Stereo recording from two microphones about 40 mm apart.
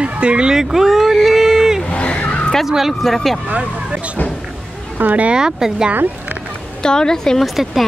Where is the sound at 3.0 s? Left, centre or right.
Centre.